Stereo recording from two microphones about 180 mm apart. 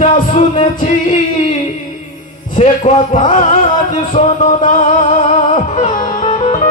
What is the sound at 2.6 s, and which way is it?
Music, 45° left (ahead or behind).